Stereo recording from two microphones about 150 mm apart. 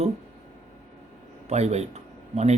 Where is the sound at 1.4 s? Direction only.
45° right (ahead or behind).